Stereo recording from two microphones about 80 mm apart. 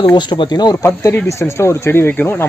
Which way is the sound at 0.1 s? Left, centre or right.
Left.